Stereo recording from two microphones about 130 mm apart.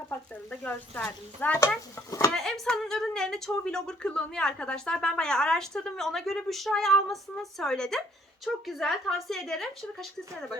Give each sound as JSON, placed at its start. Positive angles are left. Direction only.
{"t": 0.6, "sound": "speech", "side_deg": 10}
{"t": 2.3, "sound": "a woman's voice", "side_deg": 5}